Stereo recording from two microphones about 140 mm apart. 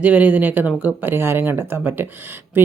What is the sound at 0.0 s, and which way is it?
Speech, 10° right (ahead or behind).